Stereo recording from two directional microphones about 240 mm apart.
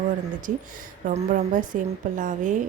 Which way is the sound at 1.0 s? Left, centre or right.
Right.